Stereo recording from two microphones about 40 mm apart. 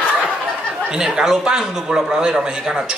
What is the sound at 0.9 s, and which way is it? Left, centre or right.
Speech, centre.